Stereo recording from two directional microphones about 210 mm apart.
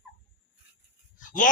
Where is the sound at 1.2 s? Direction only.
40° left (ahead or behind).